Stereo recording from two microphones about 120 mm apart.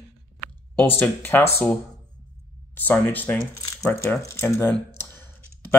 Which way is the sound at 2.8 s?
15° left (ahead or behind).